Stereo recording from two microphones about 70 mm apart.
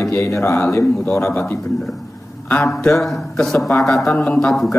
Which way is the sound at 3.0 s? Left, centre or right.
Centre.